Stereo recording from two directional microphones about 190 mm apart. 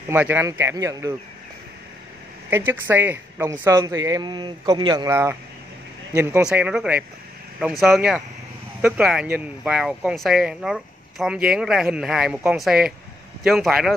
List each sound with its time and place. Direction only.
0.1 s a woman's voice: 10° right (ahead or behind)
2.5 s a woman's voice: 10° right (ahead or behind)